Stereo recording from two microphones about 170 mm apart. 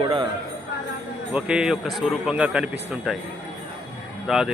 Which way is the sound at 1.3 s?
5° right (ahead or behind).